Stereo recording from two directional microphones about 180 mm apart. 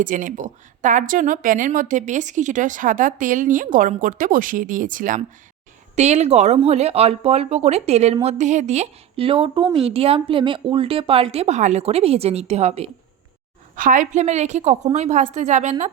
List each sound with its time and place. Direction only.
0.0 s speech: 45° right (ahead or behind)
13.7 s speech: 45° right (ahead or behind)